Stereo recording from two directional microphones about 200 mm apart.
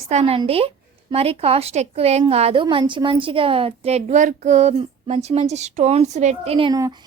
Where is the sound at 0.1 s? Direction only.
30° right (ahead or behind).